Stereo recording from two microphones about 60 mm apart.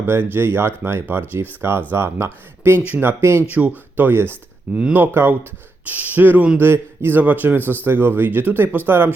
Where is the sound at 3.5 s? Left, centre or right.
Right.